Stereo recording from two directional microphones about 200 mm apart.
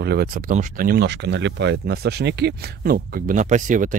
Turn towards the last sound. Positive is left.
turn(degrees=-40)  # may be behind; listen again after turning